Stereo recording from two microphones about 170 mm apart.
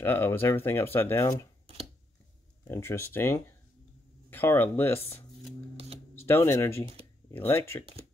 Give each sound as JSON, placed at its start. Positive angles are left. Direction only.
{"t": 0.0, "sound": "speech", "side_deg": 10}
{"t": 2.6, "sound": "speech", "side_deg": 15}
{"t": 6.1, "sound": "speech", "side_deg": 15}